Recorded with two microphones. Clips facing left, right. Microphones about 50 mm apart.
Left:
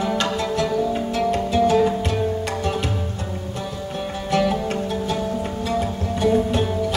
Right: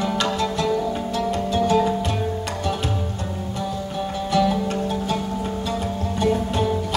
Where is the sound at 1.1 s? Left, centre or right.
Left.